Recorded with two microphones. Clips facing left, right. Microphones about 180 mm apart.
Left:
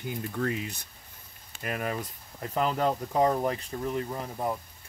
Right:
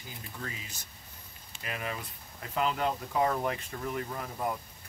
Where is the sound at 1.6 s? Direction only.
50° left (ahead or behind).